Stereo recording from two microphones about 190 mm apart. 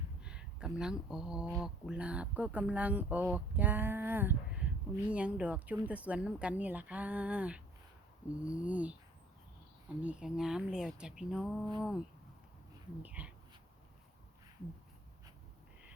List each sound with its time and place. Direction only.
0.2 s a sound: 5° right (ahead or behind)
1.6 s speech: 5° right (ahead or behind)
10.0 s speech: 5° right (ahead or behind)